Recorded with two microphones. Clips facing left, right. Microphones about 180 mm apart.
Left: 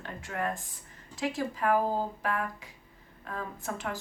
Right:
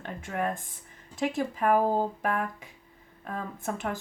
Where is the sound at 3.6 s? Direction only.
50° right (ahead or behind).